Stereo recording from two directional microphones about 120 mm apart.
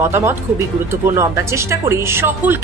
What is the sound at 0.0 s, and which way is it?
Speech, 20° right (ahead or behind).